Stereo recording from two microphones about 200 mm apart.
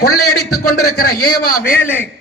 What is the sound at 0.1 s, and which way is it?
Speech, 90° left.